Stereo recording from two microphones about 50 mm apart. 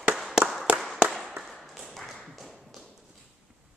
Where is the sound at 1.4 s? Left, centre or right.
Centre.